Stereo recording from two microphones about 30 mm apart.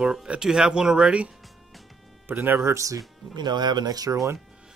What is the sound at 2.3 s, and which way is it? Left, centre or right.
Speech, right.